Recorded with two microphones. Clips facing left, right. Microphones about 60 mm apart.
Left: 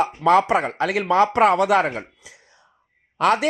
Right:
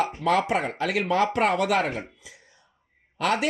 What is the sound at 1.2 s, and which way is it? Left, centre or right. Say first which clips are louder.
Speech: left 8 dB; left.